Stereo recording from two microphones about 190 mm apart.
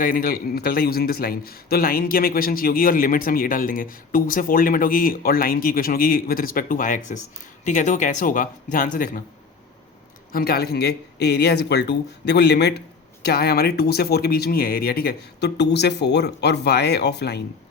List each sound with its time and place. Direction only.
0.0 s a man's voice: 50° left (ahead or behind)
10.3 s speech: 55° left (ahead or behind)